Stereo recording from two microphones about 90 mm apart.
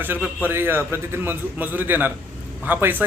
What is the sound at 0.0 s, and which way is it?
A man's voice, 20° right (ahead or behind).